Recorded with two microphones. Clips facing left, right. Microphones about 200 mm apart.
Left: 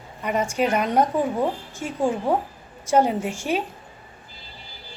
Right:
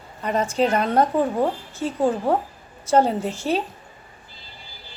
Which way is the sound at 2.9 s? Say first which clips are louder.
Right 1 dB; 10° left (ahead or behind).